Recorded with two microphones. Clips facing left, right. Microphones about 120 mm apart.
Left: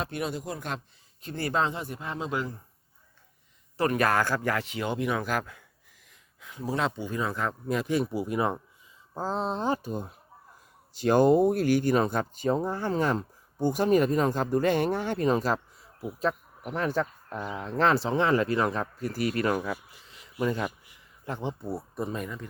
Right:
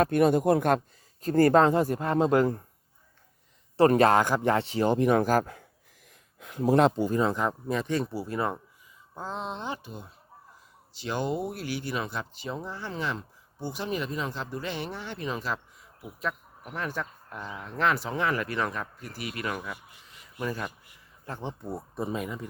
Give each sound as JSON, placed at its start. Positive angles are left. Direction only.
{"t": 0.0, "sound": "speech", "side_deg": -50}
{"t": 1.2, "sound": "speech", "side_deg": -45}
{"t": 3.8, "sound": "a man's voice", "side_deg": -30}
{"t": 6.1, "sound": "speech", "side_deg": -55}
{"t": 7.7, "sound": "speech", "side_deg": 5}
{"t": 9.1, "sound": "speech", "side_deg": 35}
{"t": 20.4, "sound": "speech", "side_deg": 25}
{"t": 21.6, "sound": "speech", "side_deg": 5}